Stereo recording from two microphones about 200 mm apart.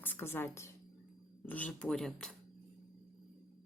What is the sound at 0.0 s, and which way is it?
A woman's voice, 10° left (ahead or behind).